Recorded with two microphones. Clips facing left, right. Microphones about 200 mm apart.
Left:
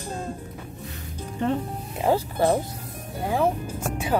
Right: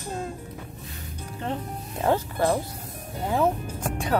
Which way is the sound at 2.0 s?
15° left (ahead or behind).